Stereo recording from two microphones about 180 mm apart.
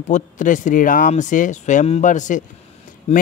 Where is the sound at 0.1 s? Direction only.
45° left (ahead or behind).